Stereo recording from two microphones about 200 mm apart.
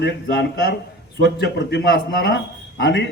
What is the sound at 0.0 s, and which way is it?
A man's voice, 55° left (ahead or behind).